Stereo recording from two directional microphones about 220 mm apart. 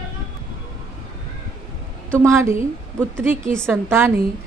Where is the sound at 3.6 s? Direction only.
10° right (ahead or behind).